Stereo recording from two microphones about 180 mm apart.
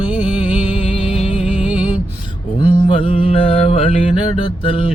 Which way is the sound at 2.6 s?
30° left (ahead or behind).